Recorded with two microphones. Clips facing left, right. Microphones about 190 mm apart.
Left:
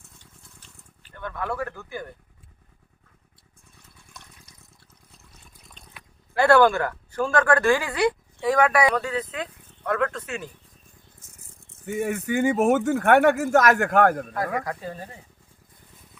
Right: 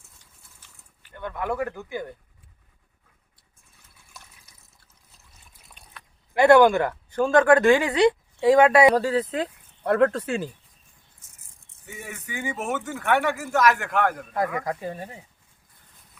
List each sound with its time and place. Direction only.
1.1 s speech: 20° right (ahead or behind)
4.1 s water: 5° right (ahead or behind)
6.3 s speech: 15° right (ahead or behind)
11.9 s speech: 50° left (ahead or behind)
14.6 s speech: 20° right (ahead or behind)